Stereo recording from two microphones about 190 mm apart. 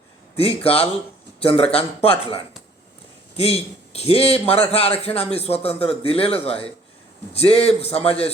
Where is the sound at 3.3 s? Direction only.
30° left (ahead or behind).